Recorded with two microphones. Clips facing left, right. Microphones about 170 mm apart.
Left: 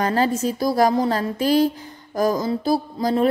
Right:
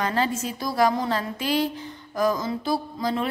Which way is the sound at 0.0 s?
40° left (ahead or behind).